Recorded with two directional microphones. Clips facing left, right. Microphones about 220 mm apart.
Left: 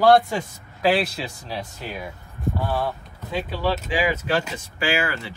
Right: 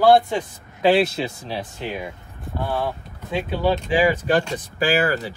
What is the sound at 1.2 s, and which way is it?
Speech, 25° right (ahead or behind).